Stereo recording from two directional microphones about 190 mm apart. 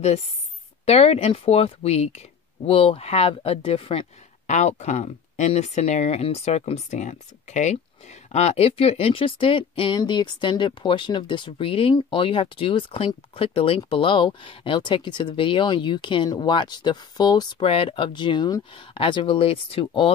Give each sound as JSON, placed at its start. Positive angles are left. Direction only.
{"t": 0.8, "sound": "speech", "side_deg": 35}